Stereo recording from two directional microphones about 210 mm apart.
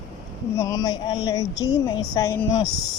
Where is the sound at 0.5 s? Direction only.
15° left (ahead or behind).